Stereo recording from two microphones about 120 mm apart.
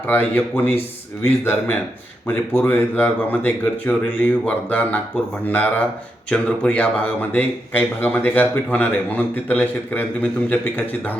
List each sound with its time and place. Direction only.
0.1 s speech: 15° left (ahead or behind)